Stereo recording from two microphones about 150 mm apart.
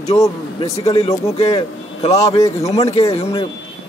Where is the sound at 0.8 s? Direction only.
40° left (ahead or behind).